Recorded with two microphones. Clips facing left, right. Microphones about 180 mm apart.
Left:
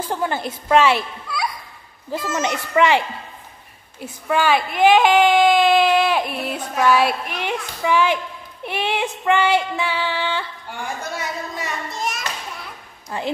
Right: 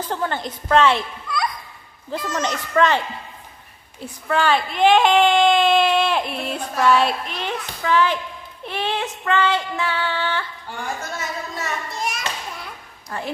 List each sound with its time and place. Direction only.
0.0 s a woman's voice: 10° left (ahead or behind)
2.0 s female singing: 5° left (ahead or behind)
4.0 s speech: 10° left (ahead or behind)
8.6 s female singing: 10° left (ahead or behind)
11.1 s speech: 15° left (ahead or behind)
11.9 s children playing: centre (ahead or behind)
13.1 s a woman's voice: 20° left (ahead or behind)